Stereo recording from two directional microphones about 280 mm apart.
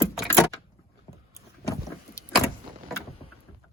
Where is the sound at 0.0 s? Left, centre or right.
Centre.